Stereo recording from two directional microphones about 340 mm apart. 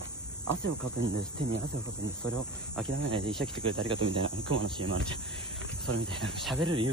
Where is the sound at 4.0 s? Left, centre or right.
Right.